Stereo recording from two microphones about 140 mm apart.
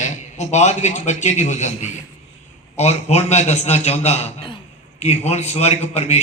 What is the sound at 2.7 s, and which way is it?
Speech, 50° left (ahead or behind).